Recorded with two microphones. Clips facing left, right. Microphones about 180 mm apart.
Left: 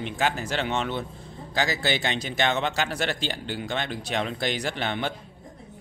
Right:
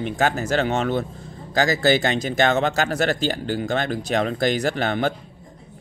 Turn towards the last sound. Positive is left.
turn(degrees=-45)  # may be behind; listen again after turning